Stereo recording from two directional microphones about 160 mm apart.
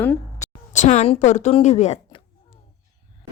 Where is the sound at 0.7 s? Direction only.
45° left (ahead or behind).